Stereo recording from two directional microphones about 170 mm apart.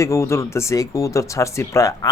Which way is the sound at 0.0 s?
15° left (ahead or behind).